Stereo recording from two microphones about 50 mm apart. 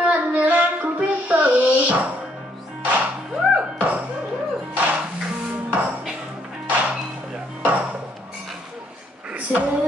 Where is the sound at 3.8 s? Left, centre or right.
Right.